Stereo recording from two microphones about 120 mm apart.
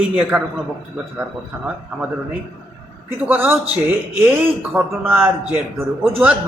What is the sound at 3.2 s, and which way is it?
Speech, 15° right (ahead or behind).